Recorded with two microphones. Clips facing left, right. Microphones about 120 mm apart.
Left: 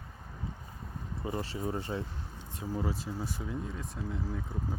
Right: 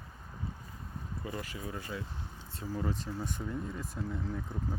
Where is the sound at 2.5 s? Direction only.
15° left (ahead or behind).